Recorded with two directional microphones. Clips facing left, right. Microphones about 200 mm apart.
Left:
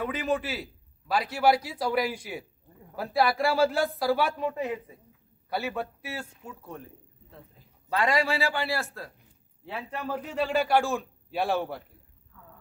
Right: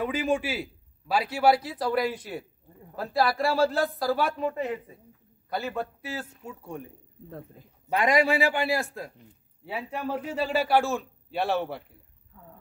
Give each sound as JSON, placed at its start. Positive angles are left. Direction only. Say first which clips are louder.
{"t": 0.0, "sound": "a man's voice", "louder": "right 3 dB", "side_deg": 0}
{"t": 0.3, "sound": "a man's voice", "louder": "right 2 dB", "side_deg": -10}
{"t": 7.9, "sound": "a man's voice", "louder": "right 3 dB", "side_deg": -15}